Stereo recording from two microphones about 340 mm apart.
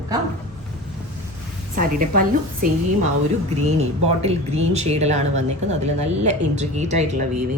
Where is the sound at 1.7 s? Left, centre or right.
Right.